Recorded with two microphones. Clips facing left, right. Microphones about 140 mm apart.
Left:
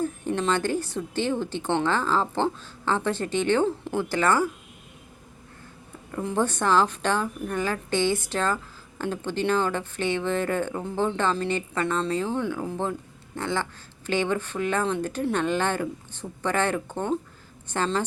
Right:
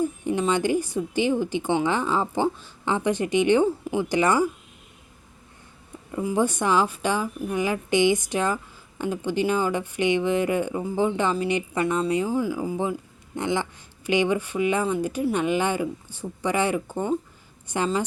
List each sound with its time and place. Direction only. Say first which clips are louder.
0.0 s speech: right 2 dB; 10° right (ahead or behind)
6.1 s speech: right 2 dB; 10° right (ahead or behind)
13.3 s speech: right 3 dB; 15° right (ahead or behind)